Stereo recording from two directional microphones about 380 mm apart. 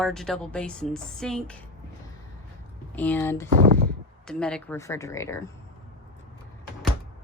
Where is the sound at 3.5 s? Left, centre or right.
Right.